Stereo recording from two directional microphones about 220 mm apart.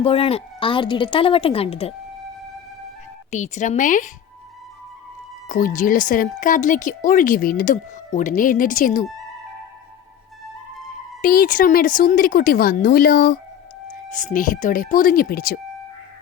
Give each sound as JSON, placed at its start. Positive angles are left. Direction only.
{"t": 0.0, "sound": "a woman's voice", "side_deg": 25}
{"t": 3.2, "sound": "speech", "side_deg": 35}
{"t": 5.5, "sound": "speech", "side_deg": 35}
{"t": 11.2, "sound": "speech", "side_deg": 40}